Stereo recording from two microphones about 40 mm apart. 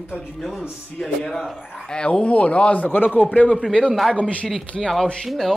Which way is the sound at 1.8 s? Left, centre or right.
Left.